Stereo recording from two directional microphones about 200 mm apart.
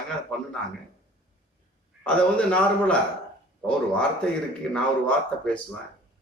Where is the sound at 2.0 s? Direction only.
5° left (ahead or behind).